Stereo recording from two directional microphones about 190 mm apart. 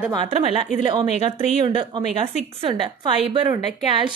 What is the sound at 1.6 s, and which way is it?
Speech, 25° right (ahead or behind).